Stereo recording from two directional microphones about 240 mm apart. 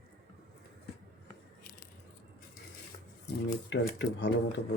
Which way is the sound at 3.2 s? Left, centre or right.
Left.